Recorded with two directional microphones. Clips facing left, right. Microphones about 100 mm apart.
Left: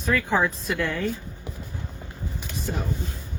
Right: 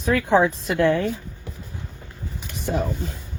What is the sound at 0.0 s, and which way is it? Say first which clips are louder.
Speech: right 5 dB; 55° right (ahead or behind).